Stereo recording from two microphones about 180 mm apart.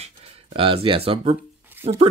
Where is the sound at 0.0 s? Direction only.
35° right (ahead or behind).